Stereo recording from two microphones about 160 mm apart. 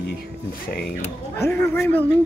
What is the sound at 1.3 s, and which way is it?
Speech, 15° left (ahead or behind).